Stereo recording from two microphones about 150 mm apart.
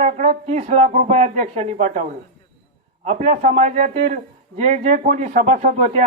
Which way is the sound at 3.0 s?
50° right (ahead or behind).